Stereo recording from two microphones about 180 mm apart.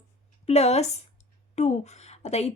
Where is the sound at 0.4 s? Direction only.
35° left (ahead or behind).